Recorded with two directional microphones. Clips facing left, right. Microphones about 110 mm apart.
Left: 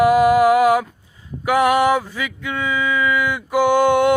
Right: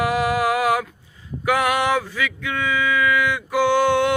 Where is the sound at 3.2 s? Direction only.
15° left (ahead or behind).